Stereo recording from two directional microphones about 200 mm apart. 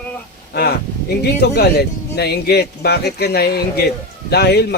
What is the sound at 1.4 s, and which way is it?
A man's voice, 55° left (ahead or behind).